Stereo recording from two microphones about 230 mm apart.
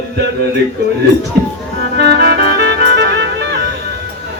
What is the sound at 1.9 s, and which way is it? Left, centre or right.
Music, right.